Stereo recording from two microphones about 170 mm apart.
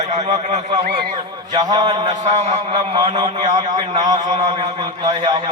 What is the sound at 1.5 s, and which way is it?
A man's voice, 25° right (ahead or behind).